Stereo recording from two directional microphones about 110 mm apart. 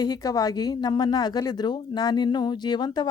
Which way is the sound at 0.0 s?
35° left (ahead or behind).